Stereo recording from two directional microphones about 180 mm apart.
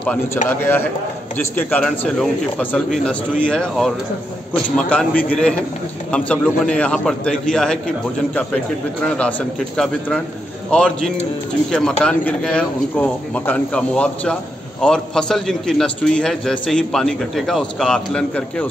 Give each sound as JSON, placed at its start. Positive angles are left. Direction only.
{"t": 0.0, "sound": "a man's voice", "side_deg": 5}
{"t": 9.0, "sound": "a man's voice", "side_deg": 5}